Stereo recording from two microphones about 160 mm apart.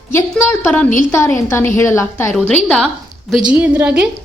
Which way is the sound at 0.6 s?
10° left (ahead or behind).